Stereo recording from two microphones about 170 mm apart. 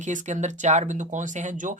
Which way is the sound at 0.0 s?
45° right (ahead or behind).